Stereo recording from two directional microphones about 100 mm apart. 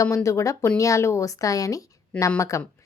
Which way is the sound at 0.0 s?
30° left (ahead or behind).